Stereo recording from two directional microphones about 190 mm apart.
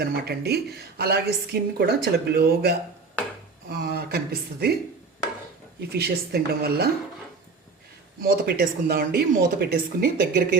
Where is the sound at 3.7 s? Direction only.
55° right (ahead or behind).